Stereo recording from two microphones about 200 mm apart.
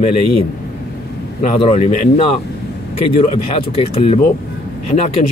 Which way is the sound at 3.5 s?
30° left (ahead or behind).